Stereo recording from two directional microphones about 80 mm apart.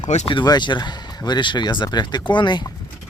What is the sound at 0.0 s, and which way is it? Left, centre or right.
Speech, left.